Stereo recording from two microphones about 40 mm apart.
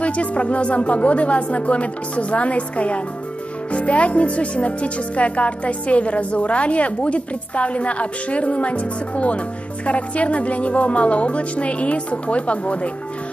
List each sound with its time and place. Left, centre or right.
0.0 s speech: left